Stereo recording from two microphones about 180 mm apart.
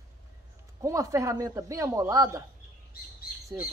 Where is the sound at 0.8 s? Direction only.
20° right (ahead or behind).